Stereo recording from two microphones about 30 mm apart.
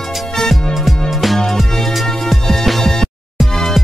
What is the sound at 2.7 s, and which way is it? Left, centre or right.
Music, centre.